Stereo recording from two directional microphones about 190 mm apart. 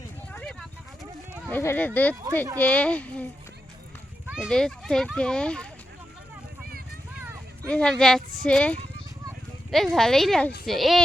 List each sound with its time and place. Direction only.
0.3 s a sound: 5° left (ahead or behind)
1.5 s speech: 10° left (ahead or behind)
4.3 s a child's voice: centre (ahead or behind)
6.7 s vehicle: 50° right (ahead or behind)
7.7 s a child's voice: 5° left (ahead or behind)